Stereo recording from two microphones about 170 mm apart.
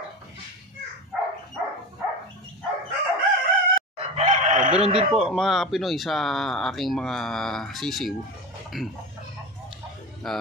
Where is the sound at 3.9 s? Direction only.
40° right (ahead or behind).